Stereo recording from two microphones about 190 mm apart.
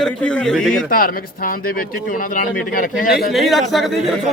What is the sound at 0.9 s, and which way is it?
Speech, 50° left (ahead or behind).